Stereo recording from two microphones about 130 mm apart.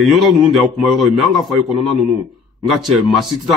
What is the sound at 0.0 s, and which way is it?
A man's voice, centre (ahead or behind).